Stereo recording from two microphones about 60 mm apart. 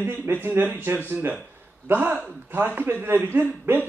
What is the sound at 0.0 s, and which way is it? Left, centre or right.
A man's voice, right.